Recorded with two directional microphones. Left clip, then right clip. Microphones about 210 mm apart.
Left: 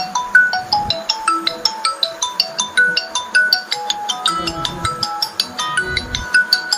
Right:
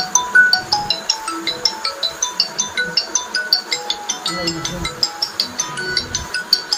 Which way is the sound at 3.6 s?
45° left (ahead or behind).